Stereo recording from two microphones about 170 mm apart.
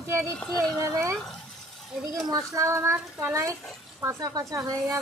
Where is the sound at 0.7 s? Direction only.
15° right (ahead or behind).